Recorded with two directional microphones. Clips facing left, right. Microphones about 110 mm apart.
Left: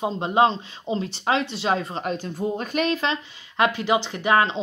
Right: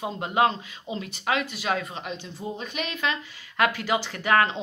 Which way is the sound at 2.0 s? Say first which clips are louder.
Left 8 dB; 45° left (ahead or behind).